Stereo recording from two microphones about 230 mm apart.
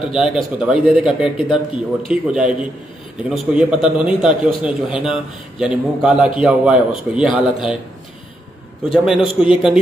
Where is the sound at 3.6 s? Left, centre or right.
Centre.